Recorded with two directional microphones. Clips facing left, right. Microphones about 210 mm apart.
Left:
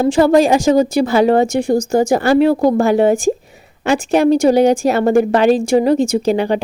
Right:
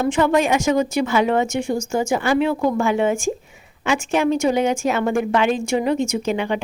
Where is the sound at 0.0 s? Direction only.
35° left (ahead or behind).